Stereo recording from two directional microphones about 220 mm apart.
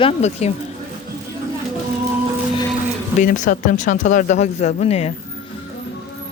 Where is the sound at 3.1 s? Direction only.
35° left (ahead or behind).